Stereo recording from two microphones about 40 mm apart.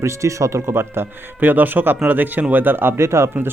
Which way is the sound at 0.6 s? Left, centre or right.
Right.